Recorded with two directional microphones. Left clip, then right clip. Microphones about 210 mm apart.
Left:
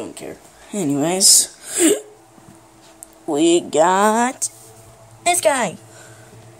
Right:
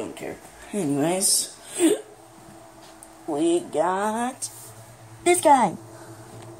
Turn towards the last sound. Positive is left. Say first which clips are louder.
# even
turn(degrees=45)  # may be behind; listen again after turning